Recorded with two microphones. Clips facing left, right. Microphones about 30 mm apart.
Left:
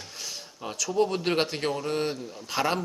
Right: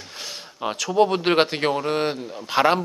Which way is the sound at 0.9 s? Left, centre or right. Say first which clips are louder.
Right 6 dB; right.